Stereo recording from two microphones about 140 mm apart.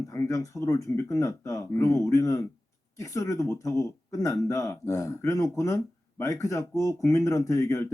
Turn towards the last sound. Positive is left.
turn(degrees=20)  # may be behind; listen again after turning